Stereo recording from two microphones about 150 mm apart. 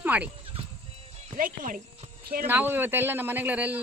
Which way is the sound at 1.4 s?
65° right (ahead or behind).